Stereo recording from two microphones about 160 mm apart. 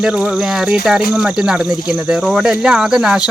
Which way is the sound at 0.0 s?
5° right (ahead or behind).